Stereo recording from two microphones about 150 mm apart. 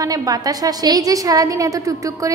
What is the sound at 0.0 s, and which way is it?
A woman's voice, 25° right (ahead or behind).